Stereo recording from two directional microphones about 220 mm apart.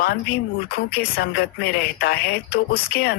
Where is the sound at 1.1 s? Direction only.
45° left (ahead or behind).